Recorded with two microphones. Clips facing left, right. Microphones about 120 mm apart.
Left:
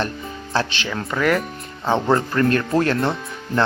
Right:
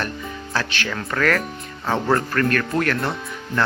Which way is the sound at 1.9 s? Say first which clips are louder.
Left 2 dB; 25° left (ahead or behind).